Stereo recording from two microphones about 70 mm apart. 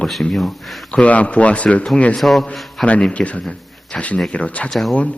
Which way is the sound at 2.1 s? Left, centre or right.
Centre.